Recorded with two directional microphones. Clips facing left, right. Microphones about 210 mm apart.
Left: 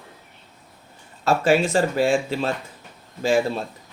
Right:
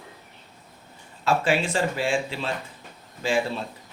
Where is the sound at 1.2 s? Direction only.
40° left (ahead or behind).